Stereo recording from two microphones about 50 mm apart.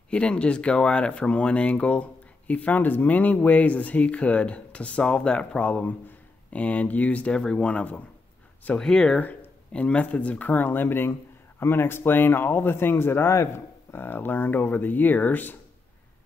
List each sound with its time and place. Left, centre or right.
0.1 s speech: left
8.7 s speech: centre
9.7 s speech: left
13.9 s speech: left